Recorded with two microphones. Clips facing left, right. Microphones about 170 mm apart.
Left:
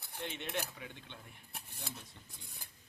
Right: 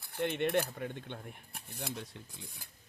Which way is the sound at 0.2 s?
60° right (ahead or behind).